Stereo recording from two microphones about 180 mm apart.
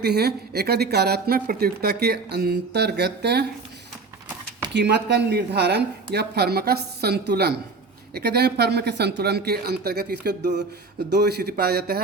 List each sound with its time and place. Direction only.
0.0 s speech: 65° right (ahead or behind)
4.7 s speech: 70° right (ahead or behind)